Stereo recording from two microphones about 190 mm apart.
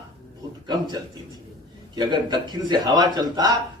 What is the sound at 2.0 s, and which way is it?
A man's voice, 25° right (ahead or behind).